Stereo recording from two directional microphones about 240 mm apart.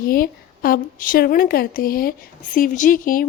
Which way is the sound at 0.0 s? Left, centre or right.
Left.